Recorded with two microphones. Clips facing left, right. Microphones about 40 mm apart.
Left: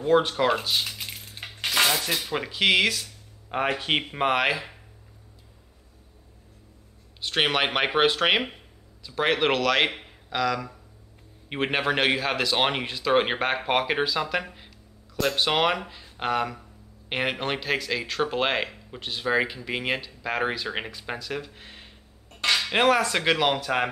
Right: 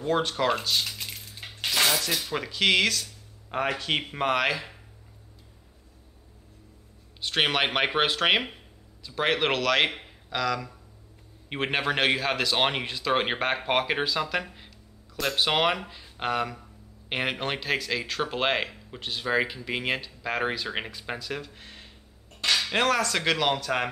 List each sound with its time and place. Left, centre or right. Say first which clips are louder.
0.0 s speech: left 4 dB; centre
1.4 s cutlery: left 3 dB; left
1.9 s speech: left 1 dB; centre
3.6 s speech: left 3 dB; left
7.2 s speech: left 1 dB; centre